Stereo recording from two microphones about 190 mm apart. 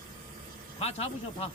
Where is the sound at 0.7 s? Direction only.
35° left (ahead or behind).